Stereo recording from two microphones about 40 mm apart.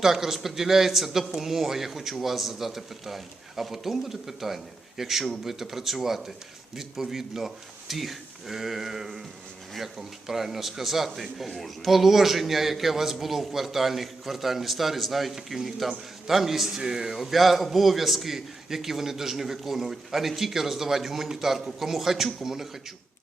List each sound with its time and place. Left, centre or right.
0.0 s a man's voice: centre